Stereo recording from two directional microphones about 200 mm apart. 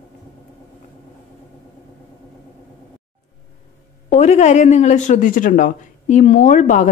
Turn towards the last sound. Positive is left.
turn(degrees=40)  # may be behind; listen again after turning